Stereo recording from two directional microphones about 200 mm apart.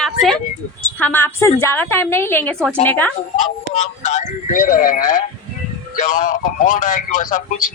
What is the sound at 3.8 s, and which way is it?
A man's voice, 35° left (ahead or behind).